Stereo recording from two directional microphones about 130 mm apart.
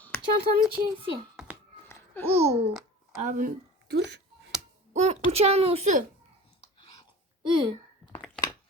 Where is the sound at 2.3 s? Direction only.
50° right (ahead or behind).